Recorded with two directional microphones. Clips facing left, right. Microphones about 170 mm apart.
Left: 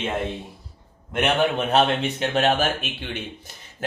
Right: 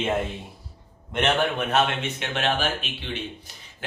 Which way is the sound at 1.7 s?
35° left (ahead or behind).